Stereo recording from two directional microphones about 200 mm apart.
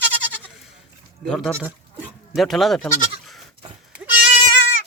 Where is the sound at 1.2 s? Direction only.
Centre (ahead or behind).